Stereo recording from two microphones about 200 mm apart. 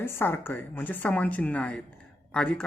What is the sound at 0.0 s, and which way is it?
A woman's voice, 10° left (ahead or behind).